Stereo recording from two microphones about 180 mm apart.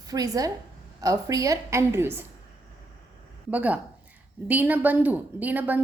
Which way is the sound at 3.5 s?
10° right (ahead or behind).